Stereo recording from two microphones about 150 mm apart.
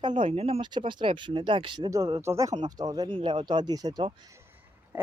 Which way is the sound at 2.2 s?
20° right (ahead or behind).